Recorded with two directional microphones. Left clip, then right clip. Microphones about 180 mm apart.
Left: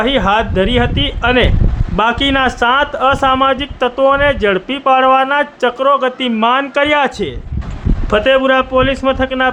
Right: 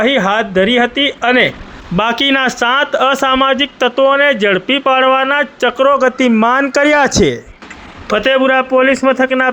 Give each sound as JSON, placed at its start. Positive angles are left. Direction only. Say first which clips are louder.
{"t": 0.0, "sound": "a man's voice", "louder": "right 1 dB", "side_deg": -15}